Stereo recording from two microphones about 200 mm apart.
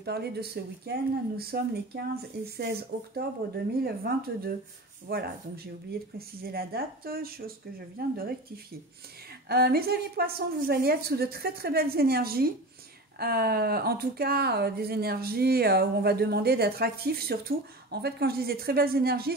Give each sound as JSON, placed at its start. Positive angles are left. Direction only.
{"t": 0.0, "sound": "speech", "side_deg": -55}
{"t": 9.5, "sound": "speech", "side_deg": -50}